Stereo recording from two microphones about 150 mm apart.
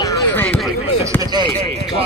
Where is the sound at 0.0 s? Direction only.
25° left (ahead or behind).